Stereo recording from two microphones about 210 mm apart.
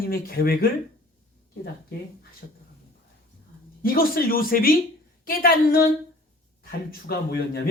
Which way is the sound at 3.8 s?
45° left (ahead or behind).